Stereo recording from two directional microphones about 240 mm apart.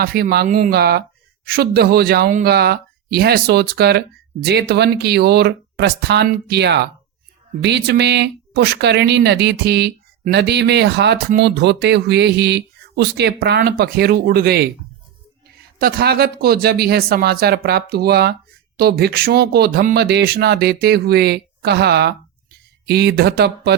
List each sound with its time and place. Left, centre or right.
0.0 s speech: right
15.8 s speech: right